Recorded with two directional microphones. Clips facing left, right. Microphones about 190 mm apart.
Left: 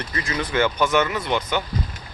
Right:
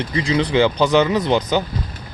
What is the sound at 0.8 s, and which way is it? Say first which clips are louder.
Speech: right 5 dB; 35° right (ahead or behind).